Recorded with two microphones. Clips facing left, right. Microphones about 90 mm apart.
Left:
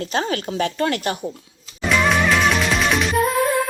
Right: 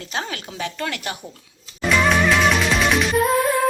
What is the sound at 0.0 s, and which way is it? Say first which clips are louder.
A woman's voice: left 6 dB; 45° left (ahead or behind).